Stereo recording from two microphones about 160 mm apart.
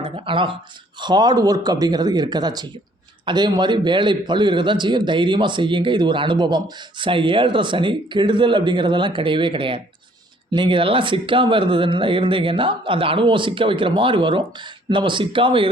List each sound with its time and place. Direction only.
0.0 s a man's voice: 30° right (ahead or behind)